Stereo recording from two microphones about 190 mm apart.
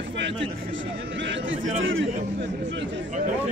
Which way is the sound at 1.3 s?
90° right.